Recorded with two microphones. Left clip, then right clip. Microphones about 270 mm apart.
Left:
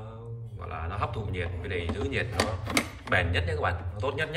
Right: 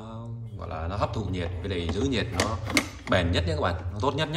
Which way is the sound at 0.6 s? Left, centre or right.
Centre.